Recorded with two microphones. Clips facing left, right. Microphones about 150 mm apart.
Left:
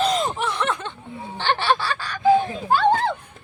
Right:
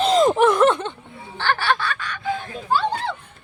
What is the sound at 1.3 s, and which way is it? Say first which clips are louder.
Speech: even; 20° left (ahead or behind).